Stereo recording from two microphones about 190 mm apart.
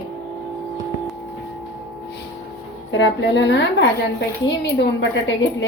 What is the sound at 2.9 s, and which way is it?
A woman's voice, 75° left (ahead or behind).